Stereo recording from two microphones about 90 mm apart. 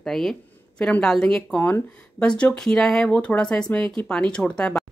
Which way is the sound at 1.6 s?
20° left (ahead or behind).